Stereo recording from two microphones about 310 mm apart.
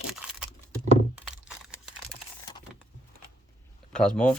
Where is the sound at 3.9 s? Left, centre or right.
Centre.